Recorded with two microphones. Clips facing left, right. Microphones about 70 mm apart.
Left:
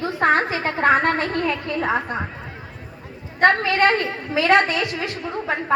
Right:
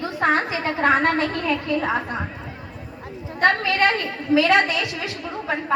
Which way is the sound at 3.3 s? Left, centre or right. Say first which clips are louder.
Left 2 dB; left.